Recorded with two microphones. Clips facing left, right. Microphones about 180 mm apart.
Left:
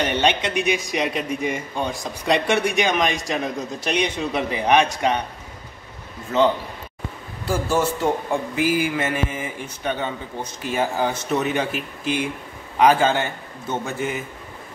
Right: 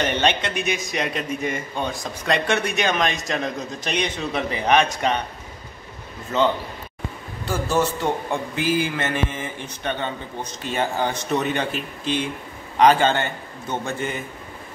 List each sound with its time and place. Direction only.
0.0 s a man's voice: 10° left (ahead or behind)
7.4 s a man's voice: 10° left (ahead or behind)